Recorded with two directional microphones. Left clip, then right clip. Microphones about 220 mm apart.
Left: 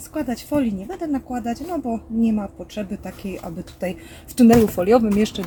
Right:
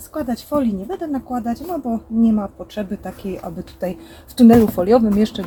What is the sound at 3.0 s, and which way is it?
Speech, 15° left (ahead or behind).